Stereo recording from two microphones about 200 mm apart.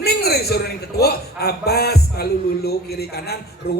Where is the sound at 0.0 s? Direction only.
50° left (ahead or behind).